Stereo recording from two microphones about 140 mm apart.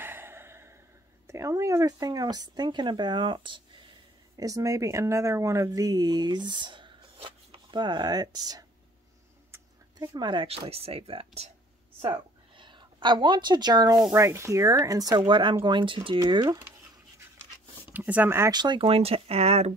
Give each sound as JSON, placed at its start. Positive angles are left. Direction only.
{"t": 0.0, "sound": "a sound", "side_deg": -15}
{"t": 1.2, "sound": "speech", "side_deg": -20}
{"t": 4.4, "sound": "speech", "side_deg": -25}
{"t": 9.9, "sound": "speech", "side_deg": -35}
{"t": 12.5, "sound": "speech", "side_deg": -35}
{"t": 17.9, "sound": "speech", "side_deg": -10}
{"t": 18.5, "sound": "speech", "side_deg": -30}